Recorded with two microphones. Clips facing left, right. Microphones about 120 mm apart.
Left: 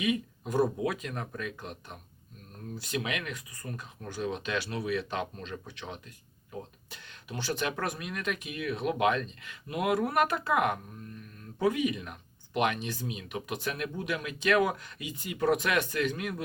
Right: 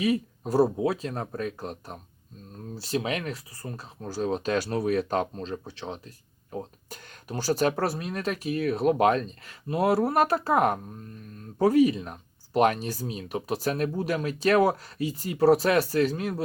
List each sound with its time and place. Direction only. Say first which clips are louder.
0.0 s speech: right 4 dB; 35° right (ahead or behind)